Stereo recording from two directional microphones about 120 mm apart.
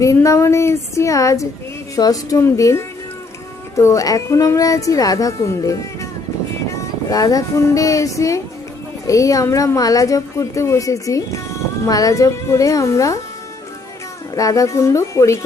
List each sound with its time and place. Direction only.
0.0 s a woman's voice: 25° left (ahead or behind)
14.3 s a woman's voice: 30° left (ahead or behind)